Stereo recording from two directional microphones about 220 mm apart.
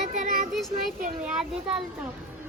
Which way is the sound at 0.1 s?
35° right (ahead or behind).